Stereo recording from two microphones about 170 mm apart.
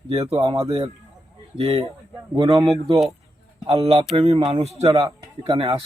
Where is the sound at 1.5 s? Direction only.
35° right (ahead or behind).